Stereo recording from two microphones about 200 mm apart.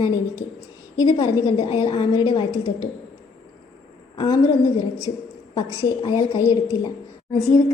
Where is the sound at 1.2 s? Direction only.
25° left (ahead or behind).